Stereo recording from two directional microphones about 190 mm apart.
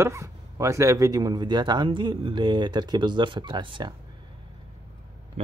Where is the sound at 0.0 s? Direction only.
15° right (ahead or behind).